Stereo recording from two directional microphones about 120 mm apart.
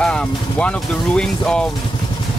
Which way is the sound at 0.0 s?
10° left (ahead or behind).